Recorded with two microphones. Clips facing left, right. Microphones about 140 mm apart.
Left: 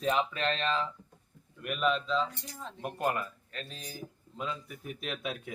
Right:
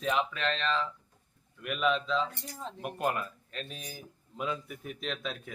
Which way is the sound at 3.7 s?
10° right (ahead or behind).